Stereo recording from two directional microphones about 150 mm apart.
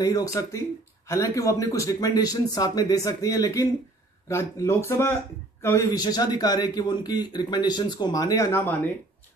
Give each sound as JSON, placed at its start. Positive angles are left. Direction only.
{"t": 0.0, "sound": "speech", "side_deg": 25}